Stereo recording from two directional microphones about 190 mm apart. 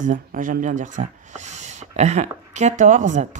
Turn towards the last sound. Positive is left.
turn(degrees=-40)  # may be behind; listen again after turning